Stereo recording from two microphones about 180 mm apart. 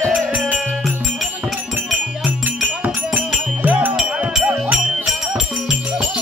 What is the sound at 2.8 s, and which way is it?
Music, 10° right (ahead or behind).